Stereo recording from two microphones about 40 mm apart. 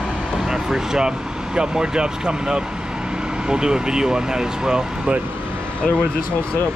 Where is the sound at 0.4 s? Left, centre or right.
Centre.